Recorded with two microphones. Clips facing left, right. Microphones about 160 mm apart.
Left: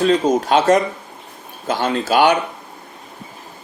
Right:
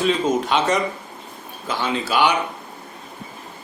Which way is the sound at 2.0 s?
45° left (ahead or behind).